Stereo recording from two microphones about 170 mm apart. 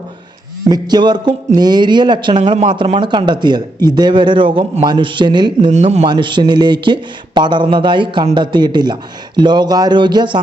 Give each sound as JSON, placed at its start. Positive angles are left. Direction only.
{"t": 0.7, "sound": "speech", "side_deg": -25}
{"t": 5.7, "sound": "a man's voice", "side_deg": -40}
{"t": 6.1, "sound": "speech", "side_deg": -30}